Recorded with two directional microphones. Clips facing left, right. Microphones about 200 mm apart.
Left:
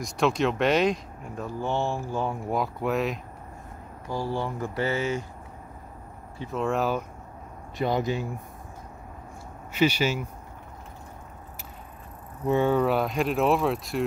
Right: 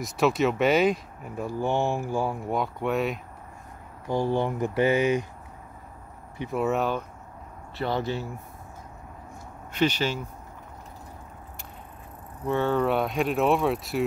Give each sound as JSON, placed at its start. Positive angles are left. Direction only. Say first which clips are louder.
{"t": 0.0, "sound": "speech", "louder": "right 1 dB", "side_deg": -5}
{"t": 4.1, "sound": "speech", "louder": "right 4 dB", "side_deg": -20}
{"t": 6.3, "sound": "speech", "louder": "right 3 dB", "side_deg": -20}
{"t": 6.6, "sound": "speech", "louder": "even", "side_deg": 0}
{"t": 7.7, "sound": "speech", "louder": "left 2 dB", "side_deg": 15}
{"t": 9.7, "sound": "speech", "louder": "left 2 dB", "side_deg": 10}
{"t": 12.4, "sound": "speech", "louder": "left 2 dB", "side_deg": 15}
{"t": 12.8, "sound": "speech", "louder": "even", "side_deg": 0}